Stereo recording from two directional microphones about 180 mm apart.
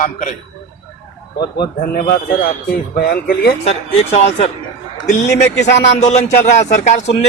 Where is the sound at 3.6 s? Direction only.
40° left (ahead or behind).